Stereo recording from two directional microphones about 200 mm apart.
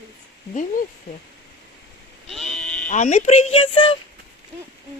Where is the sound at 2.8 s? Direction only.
35° left (ahead or behind).